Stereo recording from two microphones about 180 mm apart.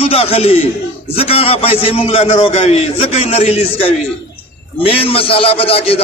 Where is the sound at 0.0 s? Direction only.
35° left (ahead or behind).